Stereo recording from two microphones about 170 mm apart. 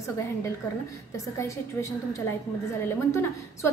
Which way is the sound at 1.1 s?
20° left (ahead or behind).